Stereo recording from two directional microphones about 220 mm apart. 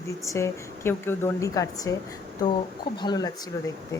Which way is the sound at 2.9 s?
20° left (ahead or behind).